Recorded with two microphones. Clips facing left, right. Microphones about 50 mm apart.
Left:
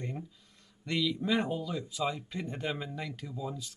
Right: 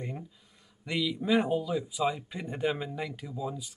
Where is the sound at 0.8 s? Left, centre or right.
Centre.